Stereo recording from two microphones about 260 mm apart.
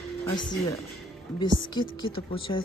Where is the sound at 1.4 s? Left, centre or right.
Centre.